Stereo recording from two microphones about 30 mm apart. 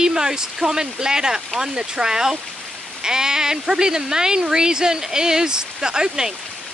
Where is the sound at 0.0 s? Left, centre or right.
Right.